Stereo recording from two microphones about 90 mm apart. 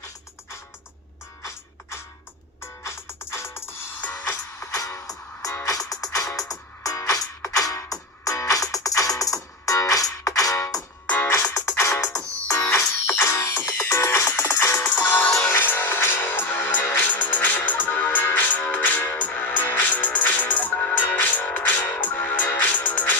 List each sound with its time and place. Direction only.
2.6 s music: 30° left (ahead or behind)
4.0 s music: 20° left (ahead or behind)
4.7 s music: 35° left (ahead or behind)
11.0 s music: 15° left (ahead or behind)
11.3 s music: 40° left (ahead or behind)
14.8 s music: 20° left (ahead or behind)